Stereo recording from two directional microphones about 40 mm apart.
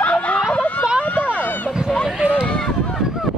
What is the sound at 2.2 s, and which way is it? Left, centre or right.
Run, right.